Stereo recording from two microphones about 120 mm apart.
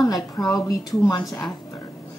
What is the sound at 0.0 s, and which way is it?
A woman's voice, 30° left (ahead or behind).